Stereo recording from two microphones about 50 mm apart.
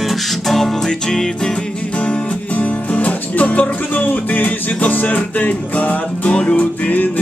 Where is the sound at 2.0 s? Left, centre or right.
Left.